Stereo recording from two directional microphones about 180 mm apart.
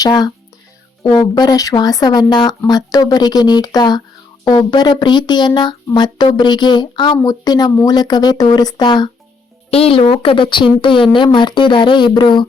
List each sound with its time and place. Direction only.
0.0 s speech: 20° left (ahead or behind)